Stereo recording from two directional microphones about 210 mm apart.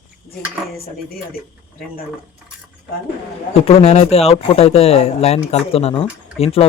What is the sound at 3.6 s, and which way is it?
Speech, 30° left (ahead or behind).